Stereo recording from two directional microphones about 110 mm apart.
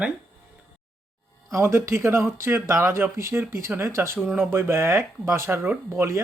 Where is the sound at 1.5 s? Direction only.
25° right (ahead or behind).